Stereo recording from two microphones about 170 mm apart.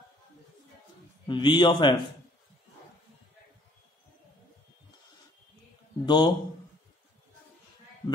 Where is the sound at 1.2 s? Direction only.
25° left (ahead or behind).